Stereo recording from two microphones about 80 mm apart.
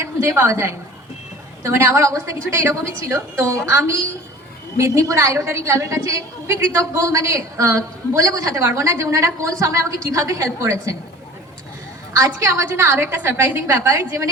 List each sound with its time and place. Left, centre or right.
0.0 s a woman's voice: right
12.1 s a woman's voice: right
13.7 s a woman's voice: right